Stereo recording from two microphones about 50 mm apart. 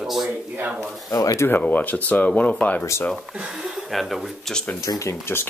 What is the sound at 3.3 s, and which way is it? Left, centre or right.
Speech, centre.